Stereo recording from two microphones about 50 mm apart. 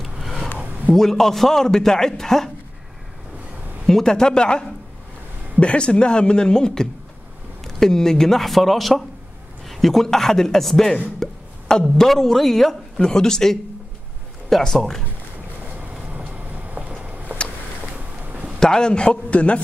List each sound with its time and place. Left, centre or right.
0.0 s a sound: centre
0.9 s a man's voice: centre
3.8 s a man's voice: centre
14.8 s a man's voice: centre
16.1 s vehicle: right
18.2 s a sound: right
18.6 s a man's voice: centre